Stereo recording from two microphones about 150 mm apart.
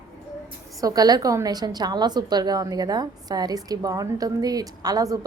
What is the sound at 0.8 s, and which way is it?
A woman's voice, 25° right (ahead or behind).